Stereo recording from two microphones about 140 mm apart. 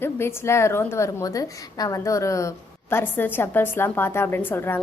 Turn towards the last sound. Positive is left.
turn(degrees=15)  # may be behind; listen again after turning